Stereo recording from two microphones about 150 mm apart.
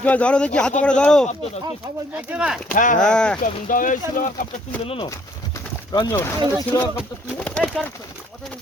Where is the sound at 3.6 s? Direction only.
60° left (ahead or behind).